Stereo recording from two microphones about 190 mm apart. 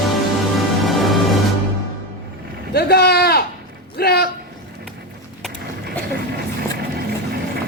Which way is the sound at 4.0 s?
55° left (ahead or behind).